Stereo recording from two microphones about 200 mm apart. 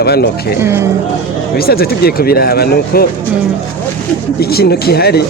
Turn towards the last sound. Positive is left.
turn(degrees=55)  # may be behind; listen again after turning